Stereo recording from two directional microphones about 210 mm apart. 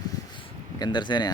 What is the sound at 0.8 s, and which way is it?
Speech, 20° left (ahead or behind).